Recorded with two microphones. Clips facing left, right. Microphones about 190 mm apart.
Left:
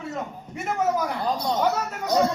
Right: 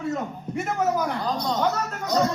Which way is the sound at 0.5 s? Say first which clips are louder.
Even; centre (ahead or behind).